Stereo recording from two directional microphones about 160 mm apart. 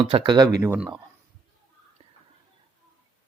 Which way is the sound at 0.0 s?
30° right (ahead or behind).